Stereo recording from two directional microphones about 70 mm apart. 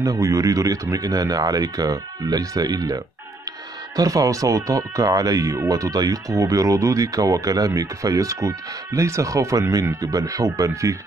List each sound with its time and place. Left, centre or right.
0.0 s speech: right